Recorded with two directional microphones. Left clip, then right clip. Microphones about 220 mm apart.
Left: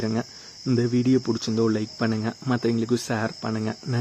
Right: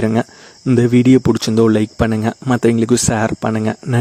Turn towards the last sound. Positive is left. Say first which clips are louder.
# right 11 dB
turn(degrees=-40)  # may be behind; listen again after turning